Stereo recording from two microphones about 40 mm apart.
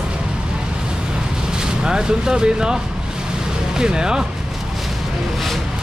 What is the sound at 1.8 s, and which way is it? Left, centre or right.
Speech, centre.